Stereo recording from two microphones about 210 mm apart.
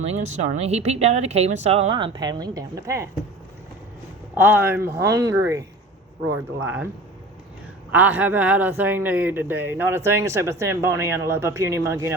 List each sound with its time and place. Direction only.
0.0 s speech: 30° right (ahead or behind); by 3.1 s 15° right (ahead or behind)
4.4 s speech: 10° right (ahead or behind)
7.9 s speech: 10° right (ahead or behind)